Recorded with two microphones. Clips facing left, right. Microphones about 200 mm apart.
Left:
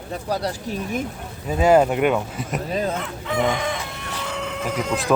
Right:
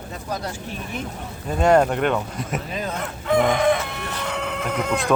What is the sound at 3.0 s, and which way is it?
Crowing, 50° right (ahead or behind).